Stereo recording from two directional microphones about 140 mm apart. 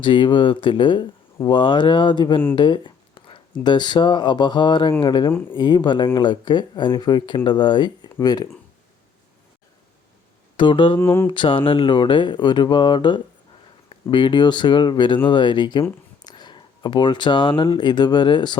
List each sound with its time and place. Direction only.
0.0 s speech: 35° left (ahead or behind)
2.6 s a sound: 35° left (ahead or behind)
3.6 s speech: 30° left (ahead or behind)
10.6 s speech: 35° left (ahead or behind)
11.0 s speech: 15° left (ahead or behind)
11.3 s speech: 35° left (ahead or behind)